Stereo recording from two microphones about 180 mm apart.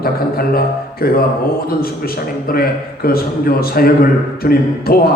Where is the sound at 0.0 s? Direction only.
55° left (ahead or behind).